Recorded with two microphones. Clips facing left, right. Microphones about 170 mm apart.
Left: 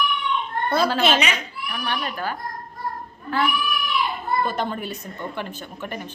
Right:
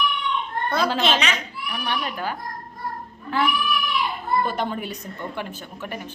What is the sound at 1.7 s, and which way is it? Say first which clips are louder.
Speech: even; 15° right (ahead or behind).